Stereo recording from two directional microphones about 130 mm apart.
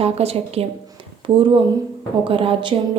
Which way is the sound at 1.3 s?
40° right (ahead or behind).